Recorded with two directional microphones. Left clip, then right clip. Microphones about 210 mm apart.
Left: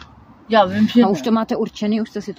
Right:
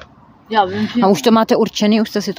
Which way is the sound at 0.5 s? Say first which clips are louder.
Left 1 dB; 50° left (ahead or behind).